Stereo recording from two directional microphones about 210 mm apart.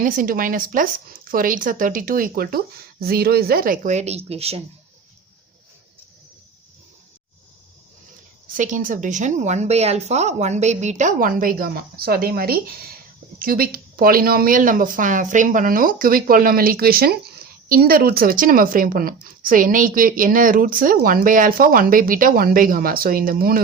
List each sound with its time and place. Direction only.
0.0 s a woman's voice: 40° right (ahead or behind)
8.5 s a woman's voice: 40° right (ahead or behind)